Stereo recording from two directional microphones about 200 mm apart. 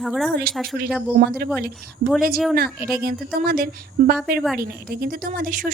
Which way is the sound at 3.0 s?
50° right (ahead or behind).